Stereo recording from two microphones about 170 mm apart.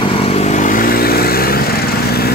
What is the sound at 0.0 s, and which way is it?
Vehicle, 35° left (ahead or behind).